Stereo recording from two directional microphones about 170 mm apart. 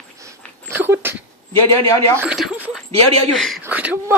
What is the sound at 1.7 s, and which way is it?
Speech, 20° left (ahead or behind).